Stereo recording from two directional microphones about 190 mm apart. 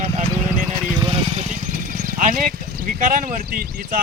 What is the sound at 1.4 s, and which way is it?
Speech, 40° right (ahead or behind).